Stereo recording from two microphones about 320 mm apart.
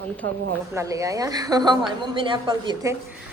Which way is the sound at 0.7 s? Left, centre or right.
Centre.